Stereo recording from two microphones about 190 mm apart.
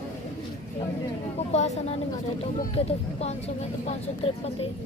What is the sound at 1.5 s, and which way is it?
Speech, 35° left (ahead or behind).